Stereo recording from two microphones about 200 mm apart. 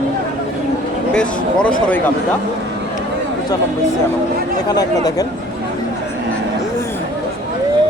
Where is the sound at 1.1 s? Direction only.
5° left (ahead or behind).